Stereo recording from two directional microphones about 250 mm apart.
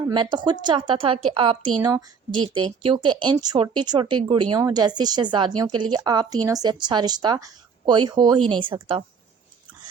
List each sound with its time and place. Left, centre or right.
0.0 s a woman's voice: centre